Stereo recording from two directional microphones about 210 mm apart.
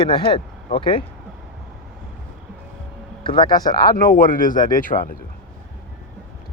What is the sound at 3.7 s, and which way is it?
Speech, 45° left (ahead or behind).